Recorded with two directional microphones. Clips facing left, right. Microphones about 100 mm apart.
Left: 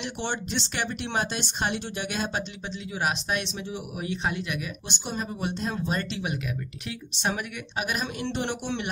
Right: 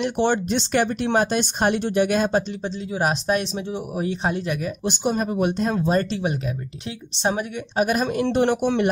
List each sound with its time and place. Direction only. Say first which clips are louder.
0.0 s speech: right 11 dB; 50° right (ahead or behind)
2.9 s speech: right 6 dB; 35° right (ahead or behind)
5.9 s speech: right 8 dB; 35° right (ahead or behind)